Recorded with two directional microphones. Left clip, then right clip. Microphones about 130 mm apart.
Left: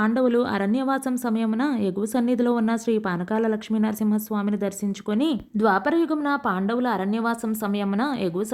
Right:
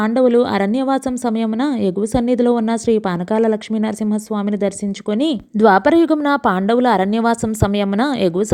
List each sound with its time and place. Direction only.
0.0 s a woman's voice: 35° right (ahead or behind)